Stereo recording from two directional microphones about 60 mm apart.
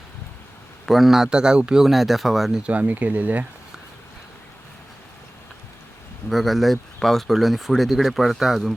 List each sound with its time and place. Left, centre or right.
0.9 s a man's voice: centre
1.8 s speech: centre
2.6 s speech: right
6.3 s speech: centre